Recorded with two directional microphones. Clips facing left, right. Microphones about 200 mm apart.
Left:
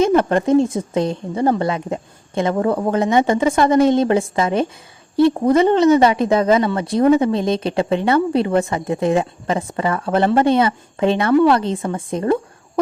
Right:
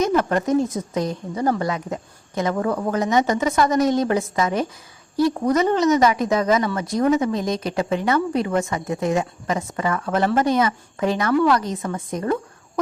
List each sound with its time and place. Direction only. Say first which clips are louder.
0.0 s speech: left 5 dB; 30° left (ahead or behind)